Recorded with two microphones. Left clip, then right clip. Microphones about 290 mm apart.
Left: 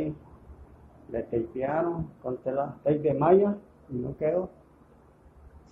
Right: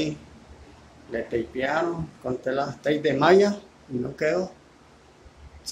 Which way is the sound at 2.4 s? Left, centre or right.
Right.